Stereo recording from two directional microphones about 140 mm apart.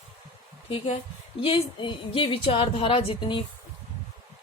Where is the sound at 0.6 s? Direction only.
45° left (ahead or behind).